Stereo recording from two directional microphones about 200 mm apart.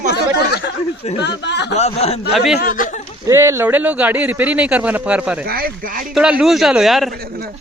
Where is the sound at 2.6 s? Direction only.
40° left (ahead or behind).